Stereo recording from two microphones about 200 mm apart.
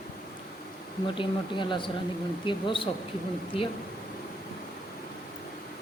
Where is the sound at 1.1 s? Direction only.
25° left (ahead or behind).